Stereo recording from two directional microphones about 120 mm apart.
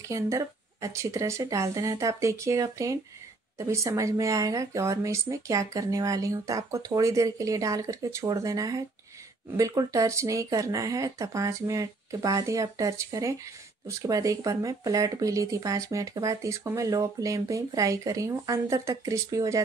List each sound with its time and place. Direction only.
0.1 s speech: 25° right (ahead or behind)